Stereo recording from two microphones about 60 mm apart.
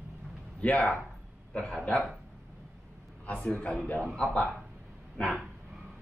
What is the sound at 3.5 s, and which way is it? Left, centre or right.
Speech, left.